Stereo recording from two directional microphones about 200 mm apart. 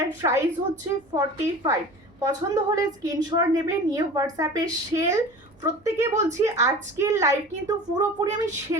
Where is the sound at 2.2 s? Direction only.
15° right (ahead or behind).